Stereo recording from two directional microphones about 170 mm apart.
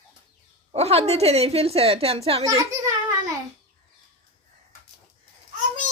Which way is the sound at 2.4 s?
20° right (ahead or behind).